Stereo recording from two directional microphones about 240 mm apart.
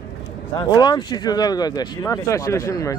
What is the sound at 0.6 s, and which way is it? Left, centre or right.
Speech, centre.